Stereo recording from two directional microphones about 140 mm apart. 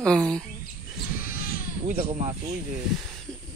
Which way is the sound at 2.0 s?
55° right (ahead or behind).